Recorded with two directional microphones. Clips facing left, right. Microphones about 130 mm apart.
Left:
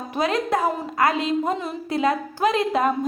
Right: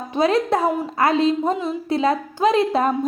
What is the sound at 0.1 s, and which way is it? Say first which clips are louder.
A woman's voice: right 4 dB; 30° right (ahead or behind).